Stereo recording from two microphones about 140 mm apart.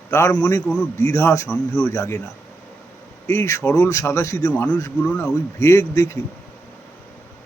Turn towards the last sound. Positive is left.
turn(degrees=20)  # may be behind; listen again after turning